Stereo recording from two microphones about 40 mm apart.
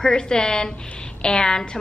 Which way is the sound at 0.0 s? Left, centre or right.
Centre.